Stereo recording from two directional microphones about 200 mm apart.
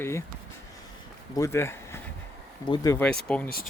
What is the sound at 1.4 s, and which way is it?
Speech, 10° left (ahead or behind).